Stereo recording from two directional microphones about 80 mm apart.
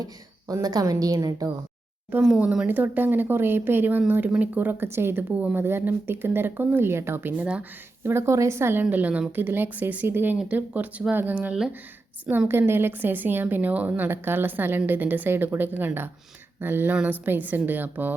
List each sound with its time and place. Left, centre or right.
0.6 s a woman's voice: right
2.4 s speech: centre
2.6 s speech: right
8.0 s a woman's voice: right